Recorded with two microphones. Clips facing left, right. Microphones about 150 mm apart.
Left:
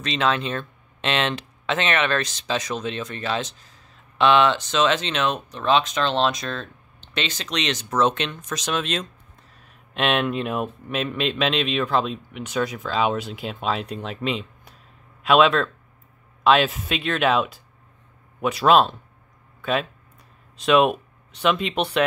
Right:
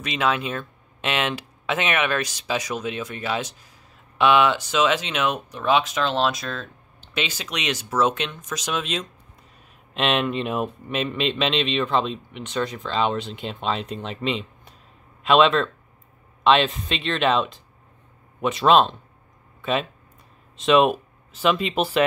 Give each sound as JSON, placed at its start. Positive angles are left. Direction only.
{"t": 0.0, "sound": "speech", "side_deg": -10}